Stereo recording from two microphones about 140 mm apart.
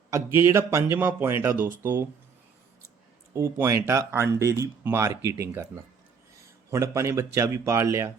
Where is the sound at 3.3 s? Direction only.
20° right (ahead or behind).